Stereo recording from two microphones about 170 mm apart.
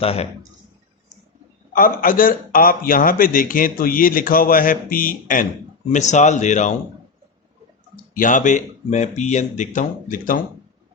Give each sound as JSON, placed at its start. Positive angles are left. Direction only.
{"t": 0.0, "sound": "speech", "side_deg": 35}
{"t": 1.7, "sound": "a man's voice", "side_deg": 55}
{"t": 8.1, "sound": "speech", "side_deg": 50}